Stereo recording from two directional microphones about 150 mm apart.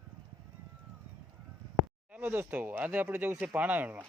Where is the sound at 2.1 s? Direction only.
15° right (ahead or behind).